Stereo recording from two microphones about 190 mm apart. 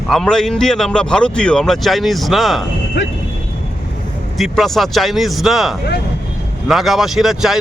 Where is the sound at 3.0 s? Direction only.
65° left (ahead or behind).